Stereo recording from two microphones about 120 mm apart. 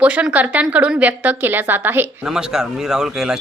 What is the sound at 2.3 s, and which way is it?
Speech, 5° right (ahead or behind).